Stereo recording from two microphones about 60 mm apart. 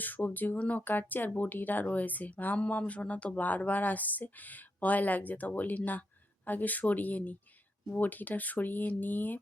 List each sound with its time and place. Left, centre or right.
0.0 s speech: left